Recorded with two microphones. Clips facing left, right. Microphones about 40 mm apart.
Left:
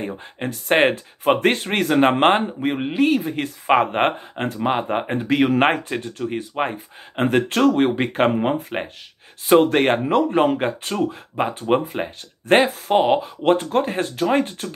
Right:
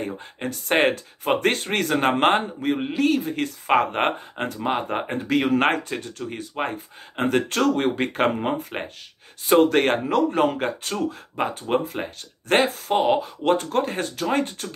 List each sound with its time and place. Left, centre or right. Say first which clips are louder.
0.0 s speech: left 2 dB; centre